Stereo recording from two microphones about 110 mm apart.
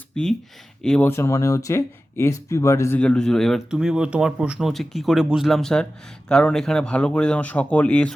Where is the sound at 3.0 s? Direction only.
10° left (ahead or behind).